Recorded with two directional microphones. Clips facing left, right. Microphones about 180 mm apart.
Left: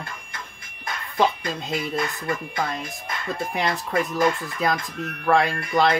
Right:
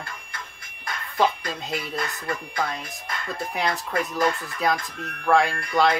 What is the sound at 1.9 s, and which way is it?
Speech, 25° left (ahead or behind).